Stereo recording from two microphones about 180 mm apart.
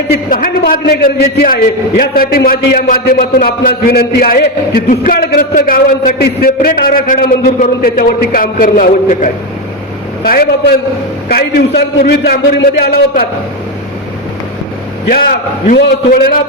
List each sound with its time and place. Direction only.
0.3 s a man's voice: 55° left (ahead or behind)
15.7 s a man's voice: 55° left (ahead or behind)